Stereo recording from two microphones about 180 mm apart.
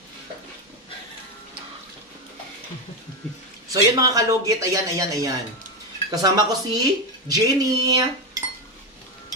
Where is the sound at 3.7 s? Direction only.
20° right (ahead or behind).